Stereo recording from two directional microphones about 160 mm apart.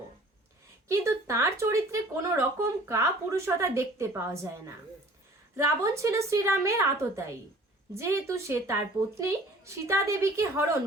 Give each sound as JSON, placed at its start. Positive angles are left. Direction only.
{"t": 0.9, "sound": "speech", "side_deg": -20}